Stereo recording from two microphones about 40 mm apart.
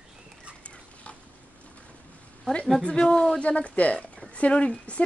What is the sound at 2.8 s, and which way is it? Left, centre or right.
Speech, left.